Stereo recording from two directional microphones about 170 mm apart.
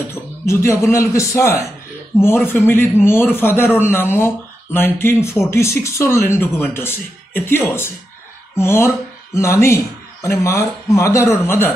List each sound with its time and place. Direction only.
0.1 s a man's voice: 15° left (ahead or behind)